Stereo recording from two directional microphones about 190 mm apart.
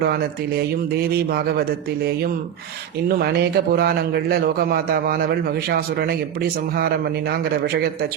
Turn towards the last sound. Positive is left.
turn(degrees=-55)  # may be behind; listen again after turning